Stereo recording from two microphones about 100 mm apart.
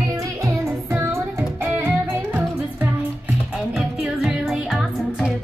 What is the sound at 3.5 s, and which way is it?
Music, 5° right (ahead or behind).